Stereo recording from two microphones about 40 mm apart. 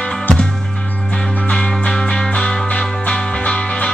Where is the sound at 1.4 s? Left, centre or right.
Left.